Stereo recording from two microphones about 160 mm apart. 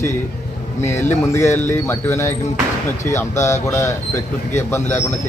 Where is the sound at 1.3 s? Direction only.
15° left (ahead or behind).